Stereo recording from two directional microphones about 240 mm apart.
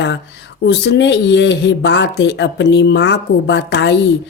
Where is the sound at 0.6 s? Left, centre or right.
Left.